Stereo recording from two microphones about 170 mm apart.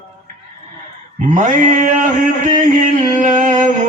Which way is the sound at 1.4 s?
45° right (ahead or behind).